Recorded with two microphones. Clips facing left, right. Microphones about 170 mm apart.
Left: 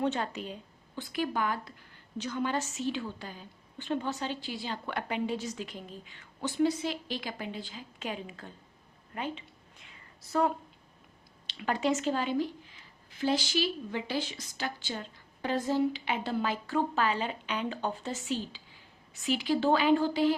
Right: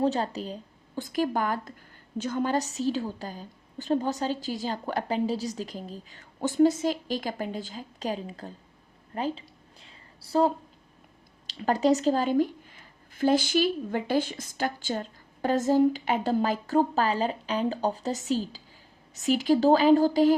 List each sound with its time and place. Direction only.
0.0 s speech: 35° right (ahead or behind)
9.1 s a sound: 35° right (ahead or behind)
11.4 s speech: 40° right (ahead or behind)